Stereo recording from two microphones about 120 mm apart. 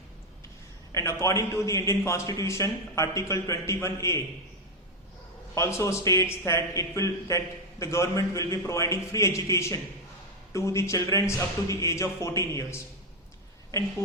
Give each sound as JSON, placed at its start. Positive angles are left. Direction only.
{"t": 0.9, "sound": "a man's voice", "side_deg": 25}
{"t": 5.5, "sound": "a man's voice", "side_deg": 25}